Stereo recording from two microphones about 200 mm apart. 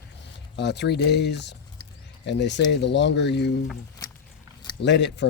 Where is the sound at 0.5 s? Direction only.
60° left (ahead or behind).